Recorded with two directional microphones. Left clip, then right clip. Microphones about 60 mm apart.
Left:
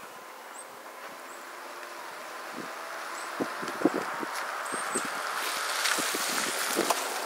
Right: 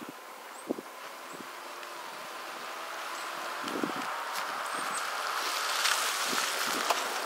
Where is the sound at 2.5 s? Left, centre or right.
Right.